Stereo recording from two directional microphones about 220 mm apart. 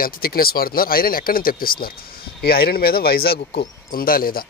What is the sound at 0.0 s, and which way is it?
Speech, 45° left (ahead or behind).